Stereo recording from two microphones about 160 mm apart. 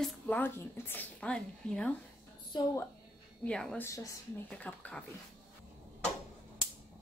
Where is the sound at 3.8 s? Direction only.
20° left (ahead or behind).